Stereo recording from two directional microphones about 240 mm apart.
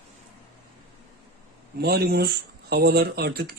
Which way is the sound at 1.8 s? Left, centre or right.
Right.